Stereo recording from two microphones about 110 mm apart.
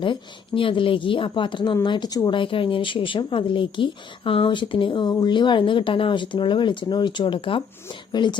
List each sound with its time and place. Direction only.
0.0 s a woman's voice: 50° left (ahead or behind)